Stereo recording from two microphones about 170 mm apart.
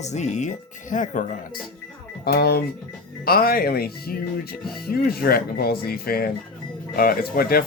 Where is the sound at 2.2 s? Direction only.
65° left (ahead or behind).